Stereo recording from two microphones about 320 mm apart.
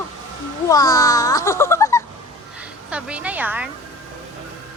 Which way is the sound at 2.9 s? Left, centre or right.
Centre.